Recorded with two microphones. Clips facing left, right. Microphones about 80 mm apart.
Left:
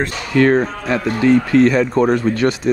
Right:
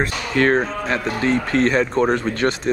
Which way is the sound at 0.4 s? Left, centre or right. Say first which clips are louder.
Left 4 dB; right.